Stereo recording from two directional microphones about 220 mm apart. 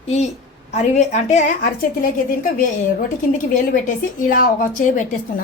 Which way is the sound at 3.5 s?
35° left (ahead or behind).